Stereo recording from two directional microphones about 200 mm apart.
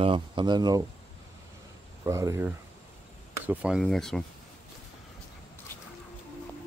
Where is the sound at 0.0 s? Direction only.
25° right (ahead or behind).